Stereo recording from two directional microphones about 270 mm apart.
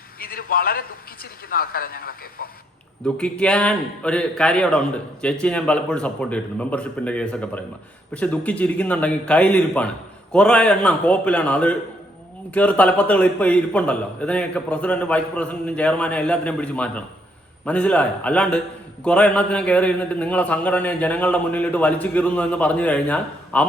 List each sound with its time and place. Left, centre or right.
0.2 s a man's voice: left
3.0 s a man's voice: centre